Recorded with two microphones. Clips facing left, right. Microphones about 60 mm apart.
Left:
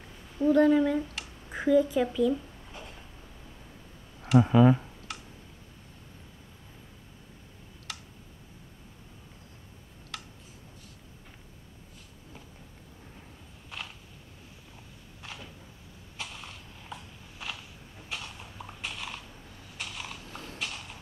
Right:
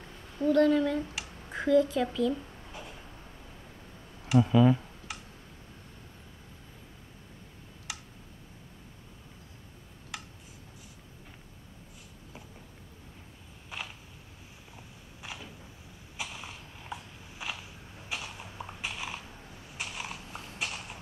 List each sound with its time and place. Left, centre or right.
0.4 s speech: centre
4.4 s speech: left
5.1 s tick-tock: centre
7.9 s clicking: centre
10.1 s tick: centre
13.7 s a sound: centre
15.2 s a sound: centre
18.1 s horse: centre
19.8 s a sound: centre